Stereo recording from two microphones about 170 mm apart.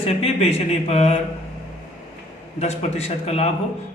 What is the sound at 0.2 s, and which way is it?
Speech, 35° left (ahead or behind).